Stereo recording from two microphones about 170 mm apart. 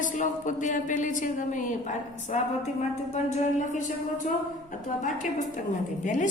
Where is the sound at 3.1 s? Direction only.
45° left (ahead or behind).